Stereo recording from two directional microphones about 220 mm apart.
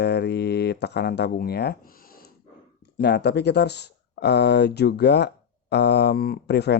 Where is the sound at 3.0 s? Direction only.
50° left (ahead or behind).